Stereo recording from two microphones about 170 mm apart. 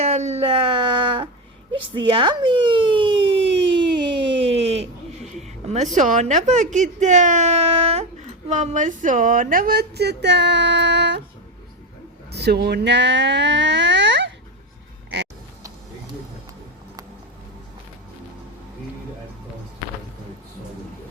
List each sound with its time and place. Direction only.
0.0 s speech: 40° right (ahead or behind)
1.7 s a sound: 30° right (ahead or behind)
5.4 s a woman's voice: 40° right (ahead or behind); by 11.2 s 85° right
12.3 s speech: 75° right (ahead or behind)